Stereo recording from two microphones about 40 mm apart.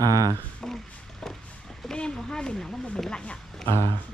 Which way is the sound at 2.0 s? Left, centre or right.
Centre.